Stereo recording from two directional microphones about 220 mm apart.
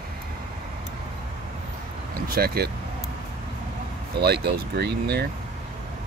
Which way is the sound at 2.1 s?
45° right (ahead or behind).